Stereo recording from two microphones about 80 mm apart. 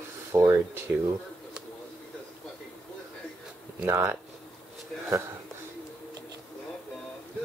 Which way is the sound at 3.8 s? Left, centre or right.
Right.